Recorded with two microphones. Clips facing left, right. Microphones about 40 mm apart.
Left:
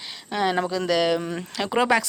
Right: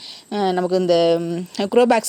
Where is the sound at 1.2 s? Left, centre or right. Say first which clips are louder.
Right 5 dB; left.